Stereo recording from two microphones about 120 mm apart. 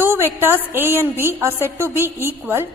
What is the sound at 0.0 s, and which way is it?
A woman's voice, 20° right (ahead or behind).